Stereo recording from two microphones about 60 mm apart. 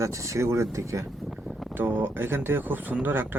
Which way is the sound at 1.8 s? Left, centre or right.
Right.